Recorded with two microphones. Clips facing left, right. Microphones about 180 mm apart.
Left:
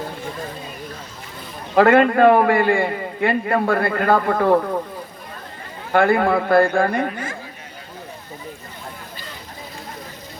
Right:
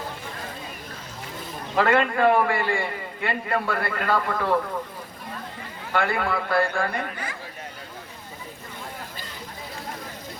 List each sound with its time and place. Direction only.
1.7 s a man's voice: 50° left (ahead or behind)
5.9 s a man's voice: 50° left (ahead or behind)